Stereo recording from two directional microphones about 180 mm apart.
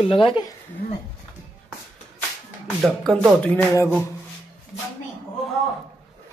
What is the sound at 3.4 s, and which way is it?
Music, 10° left (ahead or behind).